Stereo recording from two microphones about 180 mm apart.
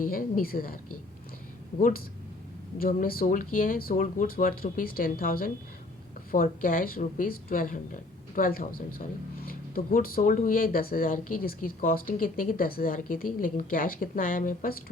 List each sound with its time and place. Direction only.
0.0 s speech: 50° left (ahead or behind)
2.7 s speech: 55° left (ahead or behind)